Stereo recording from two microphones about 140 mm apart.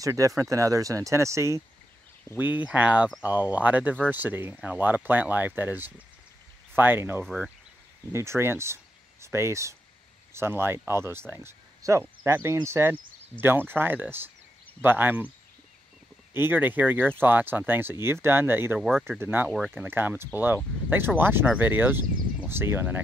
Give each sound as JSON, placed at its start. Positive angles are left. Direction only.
{"t": 0.0, "sound": "speech", "side_deg": -20}
{"t": 7.2, "sound": "speech", "side_deg": 0}
{"t": 8.1, "sound": "speech", "side_deg": -20}
{"t": 16.3, "sound": "speech", "side_deg": -15}
{"t": 18.8, "sound": "speech", "side_deg": 0}
{"t": 19.1, "sound": "speech", "side_deg": -15}
{"t": 19.5, "sound": "speech", "side_deg": 0}
{"t": 19.9, "sound": "speech", "side_deg": -15}